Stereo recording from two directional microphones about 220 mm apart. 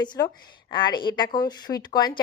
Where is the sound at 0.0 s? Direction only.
20° left (ahead or behind).